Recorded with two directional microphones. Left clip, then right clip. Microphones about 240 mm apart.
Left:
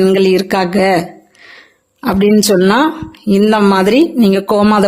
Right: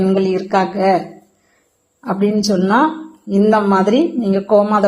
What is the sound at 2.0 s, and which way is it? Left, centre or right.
Speech, left.